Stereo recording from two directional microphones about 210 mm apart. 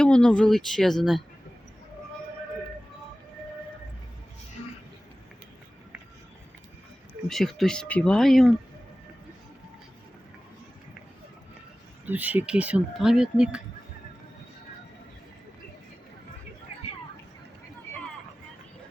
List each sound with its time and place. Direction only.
0.0 s speech: 5° left (ahead or behind)
7.3 s speech: centre (ahead or behind)
12.0 s speech: 10° right (ahead or behind)